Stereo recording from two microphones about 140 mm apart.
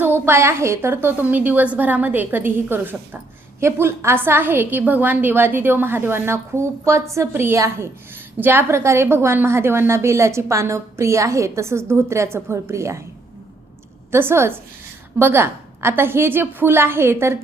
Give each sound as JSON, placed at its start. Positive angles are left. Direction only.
{"t": 0.3, "sound": "a woman's voice", "side_deg": -20}
{"t": 14.1, "sound": "a woman's voice", "side_deg": -15}